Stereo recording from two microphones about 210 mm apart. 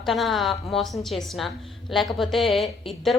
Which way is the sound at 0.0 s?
Centre (ahead or behind).